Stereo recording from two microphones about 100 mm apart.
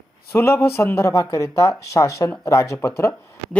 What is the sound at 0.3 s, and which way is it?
Speech, 25° left (ahead or behind).